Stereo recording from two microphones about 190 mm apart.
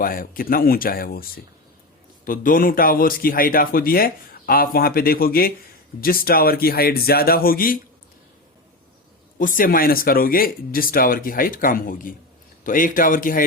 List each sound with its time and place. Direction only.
0.0 s speech: 50° left (ahead or behind)
9.4 s speech: 45° left (ahead or behind)